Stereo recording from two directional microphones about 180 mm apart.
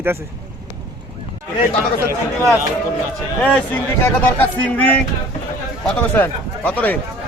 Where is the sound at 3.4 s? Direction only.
10° left (ahead or behind).